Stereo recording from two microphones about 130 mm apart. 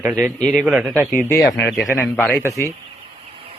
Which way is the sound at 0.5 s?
5° right (ahead or behind).